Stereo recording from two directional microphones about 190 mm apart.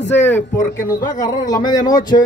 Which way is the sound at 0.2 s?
10° left (ahead or behind).